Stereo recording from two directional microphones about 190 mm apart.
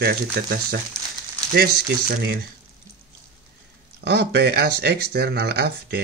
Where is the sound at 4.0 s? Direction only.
60° right (ahead or behind).